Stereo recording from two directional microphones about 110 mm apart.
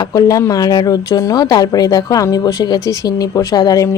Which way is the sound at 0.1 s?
35° left (ahead or behind).